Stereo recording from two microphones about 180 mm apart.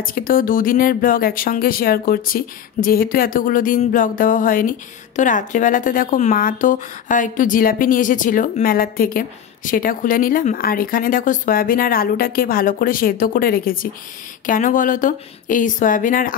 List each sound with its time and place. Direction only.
0.0 s speech: 50° left (ahead or behind)